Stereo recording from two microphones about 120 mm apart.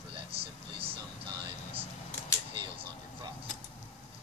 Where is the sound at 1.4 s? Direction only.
50° right (ahead or behind).